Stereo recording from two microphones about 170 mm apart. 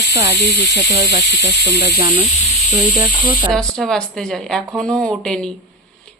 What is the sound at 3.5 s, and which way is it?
A woman's voice, 5° left (ahead or behind).